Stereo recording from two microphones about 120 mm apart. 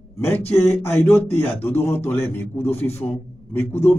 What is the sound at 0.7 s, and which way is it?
A man's voice, 20° left (ahead or behind).